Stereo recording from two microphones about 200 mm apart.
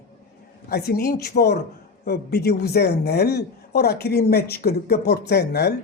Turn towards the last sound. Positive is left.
turn(degrees=55)  # may be behind; listen again after turning